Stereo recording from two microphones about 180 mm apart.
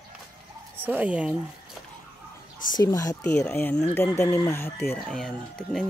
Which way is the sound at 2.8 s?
20° left (ahead or behind).